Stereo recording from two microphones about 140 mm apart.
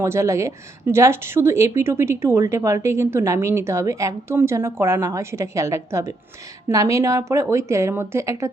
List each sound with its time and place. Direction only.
0.0 s speech: 20° right (ahead or behind)